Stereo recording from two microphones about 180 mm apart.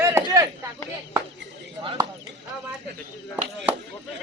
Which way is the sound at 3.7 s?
10° right (ahead or behind).